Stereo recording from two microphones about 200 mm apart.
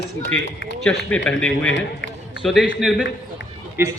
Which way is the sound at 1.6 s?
65° left (ahead or behind).